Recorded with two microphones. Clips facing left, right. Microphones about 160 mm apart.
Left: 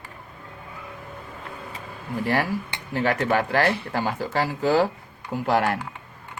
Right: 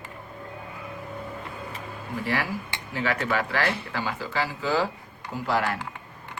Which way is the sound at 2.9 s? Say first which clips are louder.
Left 4 dB; 45° left (ahead or behind).